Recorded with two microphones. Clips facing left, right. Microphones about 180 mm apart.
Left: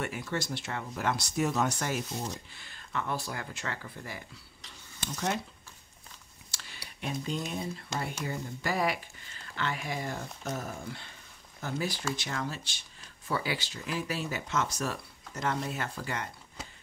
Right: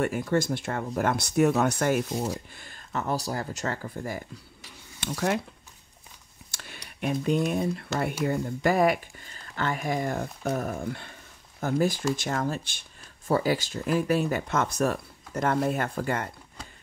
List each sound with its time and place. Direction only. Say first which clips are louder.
0.0 s speech: right 9 dB; 50° right (ahead or behind)
5.0 s speech: right 6 dB; 65° right (ahead or behind)
6.5 s a sound: right 5 dB; 55° right (ahead or behind)
7.0 s speech: right 9 dB; 60° right (ahead or behind)